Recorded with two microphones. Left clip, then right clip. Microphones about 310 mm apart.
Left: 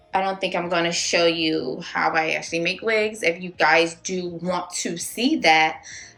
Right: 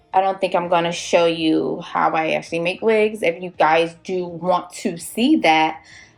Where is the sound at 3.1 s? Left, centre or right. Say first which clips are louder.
Right 2 dB; centre.